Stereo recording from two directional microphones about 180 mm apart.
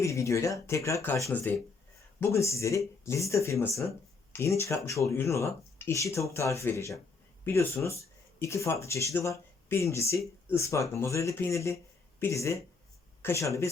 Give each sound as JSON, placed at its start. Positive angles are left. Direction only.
{"t": 0.0, "sound": "speech", "side_deg": 15}